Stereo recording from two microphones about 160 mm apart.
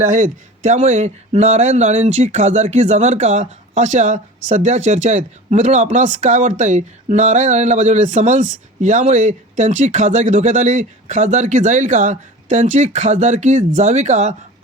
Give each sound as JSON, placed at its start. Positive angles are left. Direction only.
{"t": 0.0, "sound": "speech", "side_deg": -50}